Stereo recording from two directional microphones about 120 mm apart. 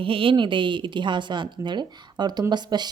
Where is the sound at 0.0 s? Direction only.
45° right (ahead or behind).